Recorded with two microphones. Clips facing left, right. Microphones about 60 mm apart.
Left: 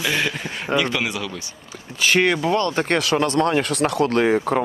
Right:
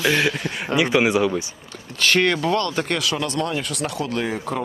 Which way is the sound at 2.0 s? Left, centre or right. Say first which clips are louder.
Left 1 dB; centre.